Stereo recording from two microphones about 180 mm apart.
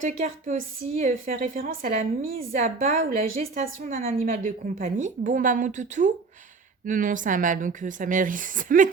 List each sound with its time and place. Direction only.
0.0 s a woman's voice: 45° right (ahead or behind)